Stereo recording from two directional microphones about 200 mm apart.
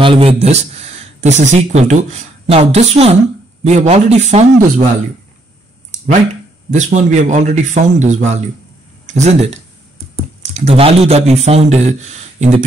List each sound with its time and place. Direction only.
0.0 s speech: 25° right (ahead or behind)
6.7 s speech: 35° right (ahead or behind)